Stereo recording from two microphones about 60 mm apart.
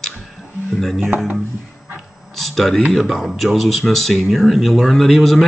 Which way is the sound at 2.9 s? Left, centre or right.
Centre.